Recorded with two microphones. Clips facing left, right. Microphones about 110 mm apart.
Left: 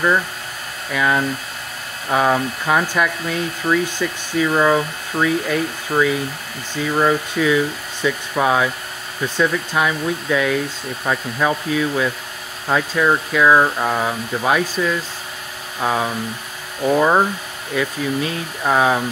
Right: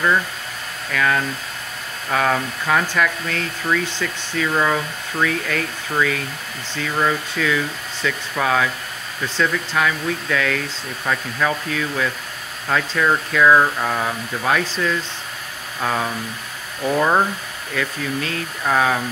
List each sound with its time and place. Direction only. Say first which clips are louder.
0.9 s speech: left 2 dB; 15° left (ahead or behind)